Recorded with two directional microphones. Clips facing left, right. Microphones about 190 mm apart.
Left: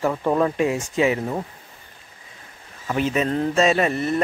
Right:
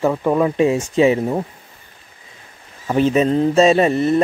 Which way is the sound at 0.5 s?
25° right (ahead or behind).